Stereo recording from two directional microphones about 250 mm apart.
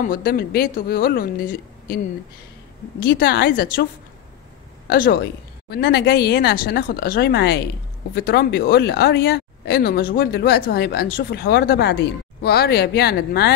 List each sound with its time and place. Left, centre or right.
0.0 s speech: left
3.1 s speech: left
4.8 s speech: left